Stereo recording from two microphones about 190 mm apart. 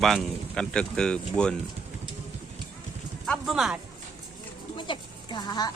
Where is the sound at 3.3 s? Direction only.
Centre (ahead or behind).